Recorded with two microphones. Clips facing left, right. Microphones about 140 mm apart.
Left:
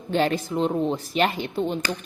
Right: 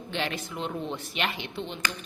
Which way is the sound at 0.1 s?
40° left (ahead or behind).